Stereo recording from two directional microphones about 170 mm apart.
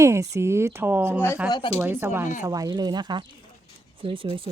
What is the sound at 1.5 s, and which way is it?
Speech, 30° left (ahead or behind).